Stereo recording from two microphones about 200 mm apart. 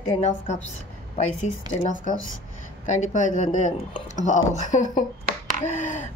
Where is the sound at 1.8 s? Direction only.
40° left (ahead or behind).